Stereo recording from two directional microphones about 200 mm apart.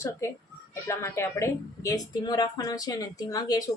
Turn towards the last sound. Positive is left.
turn(degrees=20)  # may be behind; listen again after turning